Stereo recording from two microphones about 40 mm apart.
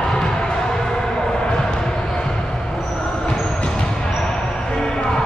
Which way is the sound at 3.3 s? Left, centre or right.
Left.